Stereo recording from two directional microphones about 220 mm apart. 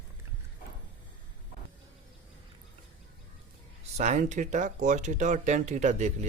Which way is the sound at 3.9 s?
30° right (ahead or behind).